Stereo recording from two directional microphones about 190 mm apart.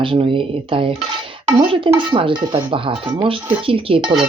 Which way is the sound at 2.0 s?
25° right (ahead or behind).